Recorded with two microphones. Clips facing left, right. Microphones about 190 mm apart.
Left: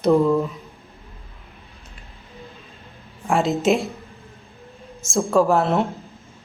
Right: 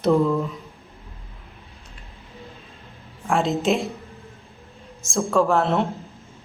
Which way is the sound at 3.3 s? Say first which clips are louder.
Left 2 dB; centre (ahead or behind).